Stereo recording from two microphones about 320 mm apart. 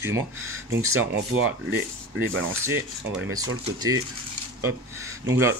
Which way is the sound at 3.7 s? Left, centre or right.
Centre.